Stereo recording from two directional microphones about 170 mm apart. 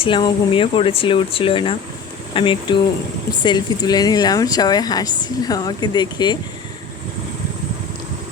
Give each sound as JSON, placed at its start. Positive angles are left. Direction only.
{"t": 0.0, "sound": "speech", "side_deg": 30}